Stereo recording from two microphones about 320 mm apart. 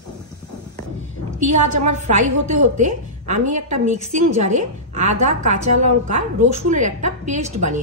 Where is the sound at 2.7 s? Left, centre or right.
Right.